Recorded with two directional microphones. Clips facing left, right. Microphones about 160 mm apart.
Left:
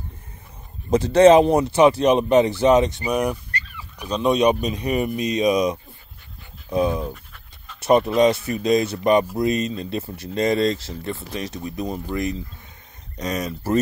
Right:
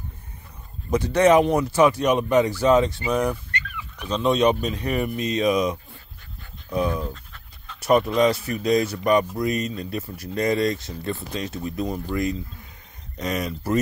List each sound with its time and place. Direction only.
0.8 s speech: 25° left (ahead or behind)